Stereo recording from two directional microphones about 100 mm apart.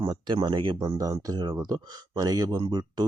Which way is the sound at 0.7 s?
35° right (ahead or behind).